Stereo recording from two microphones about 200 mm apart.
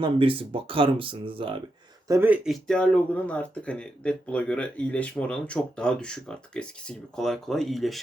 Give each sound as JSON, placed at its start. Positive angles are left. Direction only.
{"t": 0.0, "sound": "speech", "side_deg": -25}
{"t": 2.0, "sound": "speech", "side_deg": -10}